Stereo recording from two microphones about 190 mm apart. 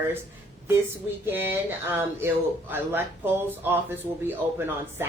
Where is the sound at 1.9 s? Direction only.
10° right (ahead or behind).